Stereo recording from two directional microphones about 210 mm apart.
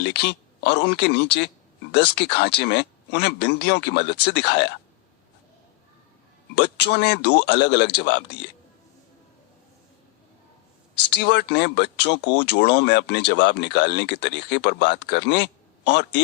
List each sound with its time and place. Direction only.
0.0 s speech: 55° left (ahead or behind)
6.6 s speech: 55° left (ahead or behind)
10.9 s speech: 55° left (ahead or behind)